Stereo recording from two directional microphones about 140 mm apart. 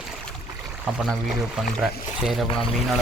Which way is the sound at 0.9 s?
Centre (ahead or behind).